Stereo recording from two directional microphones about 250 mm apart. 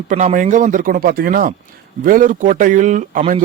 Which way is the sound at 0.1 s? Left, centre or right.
Right.